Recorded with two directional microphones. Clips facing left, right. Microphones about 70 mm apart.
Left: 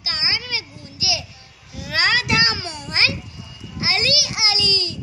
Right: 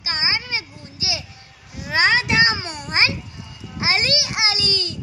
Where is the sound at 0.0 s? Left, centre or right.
Right.